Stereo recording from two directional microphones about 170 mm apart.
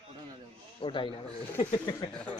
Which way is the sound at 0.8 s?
30° left (ahead or behind).